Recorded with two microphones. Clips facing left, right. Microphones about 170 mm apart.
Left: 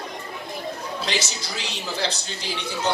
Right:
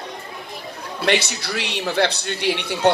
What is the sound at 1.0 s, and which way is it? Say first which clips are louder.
Speech: right 10 dB; 60° right (ahead or behind).